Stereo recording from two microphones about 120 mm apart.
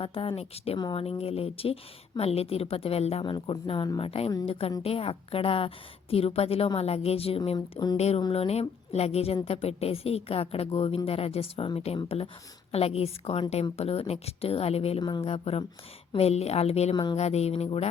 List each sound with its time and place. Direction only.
0.0 s a woman's voice: 50° left (ahead or behind)
3.2 s speech: 40° left (ahead or behind)
4.4 s a woman's voice: 50° left (ahead or behind)
7.5 s speech: 35° left (ahead or behind)
7.9 s a woman's voice: 60° left (ahead or behind)
16.9 s speech: 40° left (ahead or behind)
17.2 s a woman's voice: 65° left (ahead or behind)